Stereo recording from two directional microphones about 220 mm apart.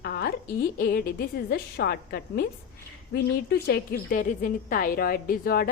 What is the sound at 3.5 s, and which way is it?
A woman's voice, 45° left (ahead or behind).